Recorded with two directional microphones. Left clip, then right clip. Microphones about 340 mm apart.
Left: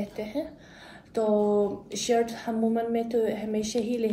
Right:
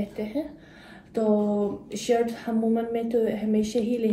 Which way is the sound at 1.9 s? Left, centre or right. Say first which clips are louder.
Right 1 dB; centre.